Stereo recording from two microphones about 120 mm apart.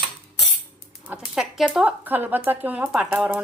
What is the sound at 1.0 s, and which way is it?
Speech, 5° right (ahead or behind).